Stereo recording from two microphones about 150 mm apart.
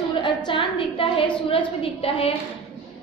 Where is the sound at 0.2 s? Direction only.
35° left (ahead or behind).